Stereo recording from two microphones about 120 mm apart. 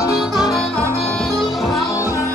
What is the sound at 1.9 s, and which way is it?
Music, 25° left (ahead or behind).